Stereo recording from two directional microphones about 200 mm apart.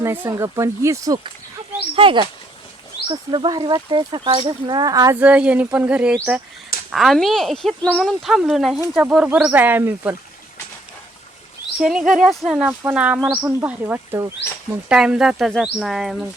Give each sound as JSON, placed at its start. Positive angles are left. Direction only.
{"t": 0.0, "sound": "speech", "side_deg": -10}
{"t": 5.2, "sound": "speech", "side_deg": -5}
{"t": 11.8, "sound": "speech", "side_deg": -5}